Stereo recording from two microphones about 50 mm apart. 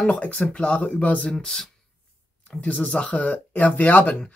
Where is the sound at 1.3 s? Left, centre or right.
Centre.